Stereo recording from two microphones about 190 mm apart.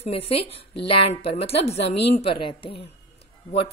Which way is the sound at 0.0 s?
30° left (ahead or behind).